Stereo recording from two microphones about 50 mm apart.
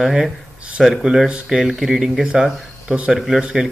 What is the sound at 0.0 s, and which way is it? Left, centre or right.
Speech, centre.